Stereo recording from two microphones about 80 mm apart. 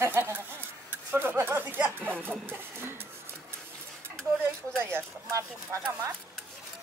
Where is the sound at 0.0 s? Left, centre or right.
Right.